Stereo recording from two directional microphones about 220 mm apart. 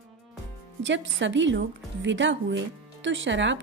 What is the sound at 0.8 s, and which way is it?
A woman's voice, 55° right (ahead or behind).